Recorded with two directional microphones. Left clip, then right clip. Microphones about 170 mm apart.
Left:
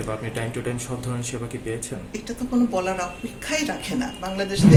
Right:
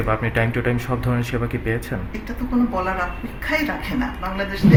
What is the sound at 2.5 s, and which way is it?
A woman's voice, 5° left (ahead or behind).